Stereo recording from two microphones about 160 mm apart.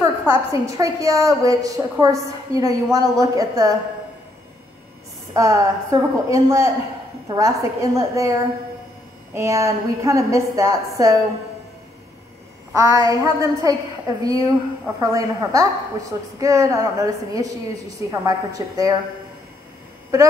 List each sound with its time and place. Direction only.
0.0 s a woman's voice: 20° right (ahead or behind)
5.3 s a woman's voice: 20° right (ahead or behind)
12.7 s a woman's voice: 20° right (ahead or behind)
20.1 s a woman's voice: 20° right (ahead or behind)